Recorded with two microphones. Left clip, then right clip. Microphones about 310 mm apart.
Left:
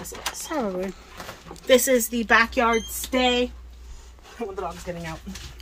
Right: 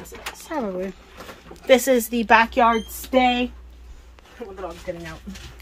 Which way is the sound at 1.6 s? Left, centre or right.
Centre.